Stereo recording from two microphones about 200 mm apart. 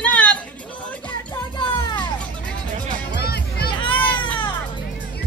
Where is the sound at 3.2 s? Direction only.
50° left (ahead or behind).